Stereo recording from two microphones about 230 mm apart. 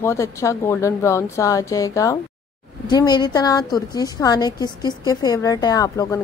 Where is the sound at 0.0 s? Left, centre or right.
Centre.